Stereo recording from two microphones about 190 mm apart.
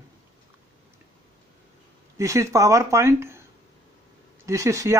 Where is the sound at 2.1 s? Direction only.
15° right (ahead or behind).